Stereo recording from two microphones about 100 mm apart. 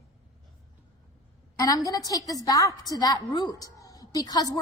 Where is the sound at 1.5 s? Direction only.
40° left (ahead or behind).